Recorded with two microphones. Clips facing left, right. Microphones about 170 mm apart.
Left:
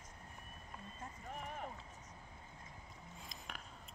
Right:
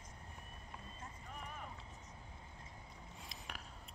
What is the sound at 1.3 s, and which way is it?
Run, 45° left (ahead or behind).